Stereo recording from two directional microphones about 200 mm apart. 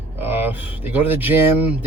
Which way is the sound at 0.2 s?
10° right (ahead or behind).